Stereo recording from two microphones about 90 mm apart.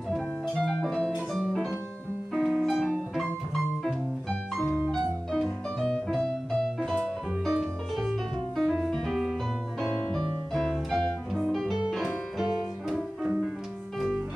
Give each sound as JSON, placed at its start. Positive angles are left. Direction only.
{"t": 0.1, "sound": "music", "side_deg": 10}
{"t": 1.1, "sound": "music", "side_deg": -5}
{"t": 4.9, "sound": "music", "side_deg": 0}
{"t": 7.4, "sound": "music", "side_deg": 0}